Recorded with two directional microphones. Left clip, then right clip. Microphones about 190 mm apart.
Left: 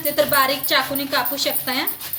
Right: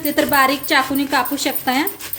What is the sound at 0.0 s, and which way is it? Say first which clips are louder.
A woman's voice: right 3 dB; 45° right (ahead or behind).